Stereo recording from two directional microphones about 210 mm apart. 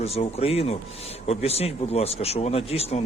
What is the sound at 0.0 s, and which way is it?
Speech, 30° left (ahead or behind).